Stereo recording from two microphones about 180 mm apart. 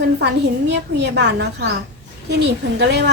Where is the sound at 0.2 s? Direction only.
70° right (ahead or behind).